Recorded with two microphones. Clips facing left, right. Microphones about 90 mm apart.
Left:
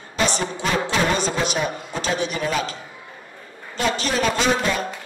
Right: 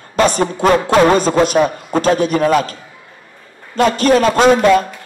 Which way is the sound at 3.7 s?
50° right (ahead or behind).